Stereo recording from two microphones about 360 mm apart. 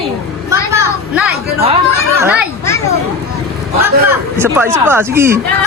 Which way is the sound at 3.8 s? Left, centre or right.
Centre.